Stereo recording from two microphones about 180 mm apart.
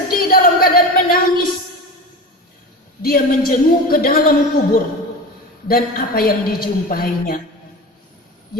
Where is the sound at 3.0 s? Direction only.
55° left (ahead or behind).